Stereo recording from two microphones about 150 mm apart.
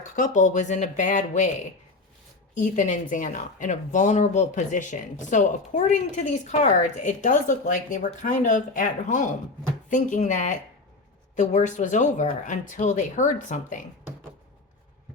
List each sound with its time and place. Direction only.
0.2 s speech: 55° left (ahead or behind)
2.6 s speech: 55° left (ahead or behind)